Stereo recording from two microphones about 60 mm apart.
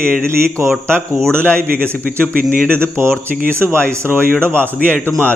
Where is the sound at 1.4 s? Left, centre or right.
Centre.